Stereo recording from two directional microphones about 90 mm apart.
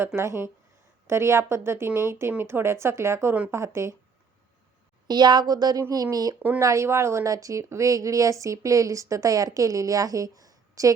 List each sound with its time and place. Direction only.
0.2 s a woman's voice: 30° right (ahead or behind)
5.0 s a woman's voice: 50° right (ahead or behind)